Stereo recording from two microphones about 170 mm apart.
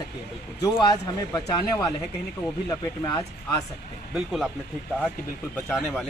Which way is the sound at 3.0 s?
20° left (ahead or behind).